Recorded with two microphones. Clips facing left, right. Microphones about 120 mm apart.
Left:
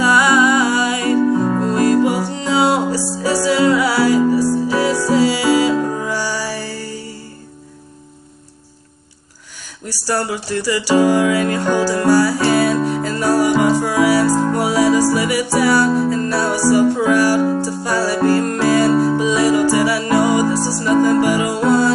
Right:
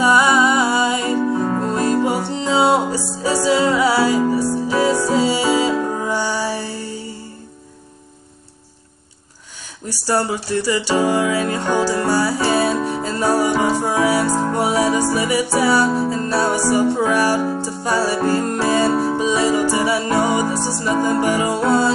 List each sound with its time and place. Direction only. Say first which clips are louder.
0.0 s music: left 1 dB; 20° right (ahead or behind)
9.8 s music: right 1 dB; 25° right (ahead or behind)